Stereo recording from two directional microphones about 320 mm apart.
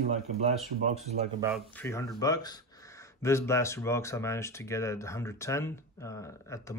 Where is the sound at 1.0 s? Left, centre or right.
Centre.